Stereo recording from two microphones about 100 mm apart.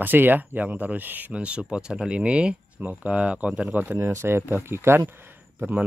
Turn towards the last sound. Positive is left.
turn(degrees=-20)  # may be behind; listen again after turning